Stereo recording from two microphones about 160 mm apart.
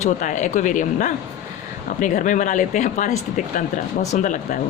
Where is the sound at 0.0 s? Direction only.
50° left (ahead or behind).